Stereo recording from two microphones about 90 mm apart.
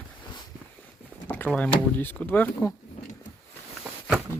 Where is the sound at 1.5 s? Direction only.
20° left (ahead or behind).